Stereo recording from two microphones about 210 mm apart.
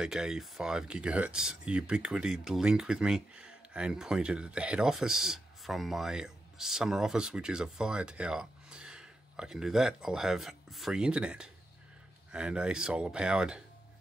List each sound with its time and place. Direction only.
0.0 s speech: centre (ahead or behind)